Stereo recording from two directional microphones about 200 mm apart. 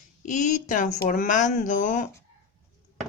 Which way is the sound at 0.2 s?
40° left (ahead or behind).